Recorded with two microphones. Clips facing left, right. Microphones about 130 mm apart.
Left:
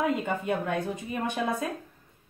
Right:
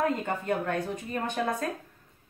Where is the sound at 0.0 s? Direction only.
10° left (ahead or behind).